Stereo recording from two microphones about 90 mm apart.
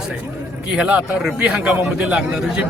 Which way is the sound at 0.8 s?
15° right (ahead or behind).